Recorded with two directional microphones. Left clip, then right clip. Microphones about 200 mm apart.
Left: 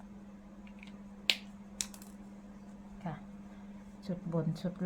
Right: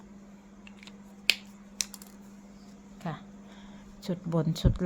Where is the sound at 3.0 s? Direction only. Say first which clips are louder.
Right 5 dB; 55° right (ahead or behind).